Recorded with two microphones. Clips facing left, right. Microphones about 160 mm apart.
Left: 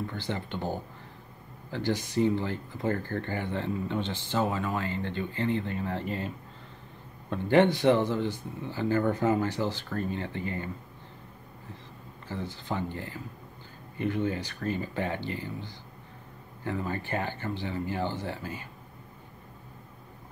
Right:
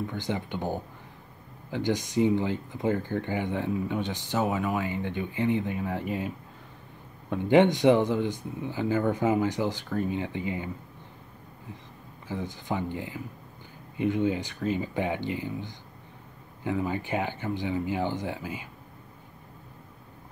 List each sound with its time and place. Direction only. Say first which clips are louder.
0.0 s speech: right 3 dB; 15° right (ahead or behind)
12.3 s speech: right 2 dB; 15° right (ahead or behind)